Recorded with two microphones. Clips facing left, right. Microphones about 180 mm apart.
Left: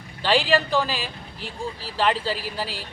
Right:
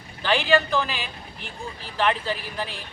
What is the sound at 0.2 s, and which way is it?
Speech, 35° left (ahead or behind).